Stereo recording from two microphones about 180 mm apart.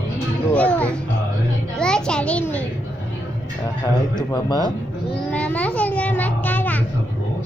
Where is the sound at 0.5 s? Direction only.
10° left (ahead or behind).